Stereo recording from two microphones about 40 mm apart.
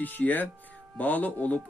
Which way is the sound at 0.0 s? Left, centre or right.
Left.